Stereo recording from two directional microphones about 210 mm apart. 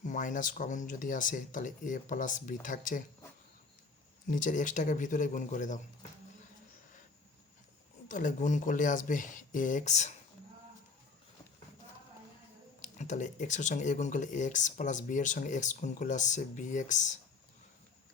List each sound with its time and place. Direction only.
0.0 s speech: 40° left (ahead or behind)
4.3 s speech: 40° left (ahead or behind)
8.0 s speech: 40° left (ahead or behind)
12.8 s speech: 35° left (ahead or behind)